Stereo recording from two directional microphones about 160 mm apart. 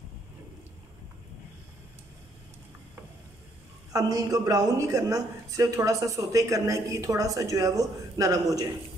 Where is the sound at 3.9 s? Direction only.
25° right (ahead or behind).